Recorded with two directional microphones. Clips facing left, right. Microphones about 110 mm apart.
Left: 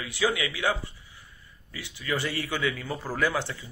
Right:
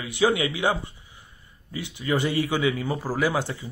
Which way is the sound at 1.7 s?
20° right (ahead or behind).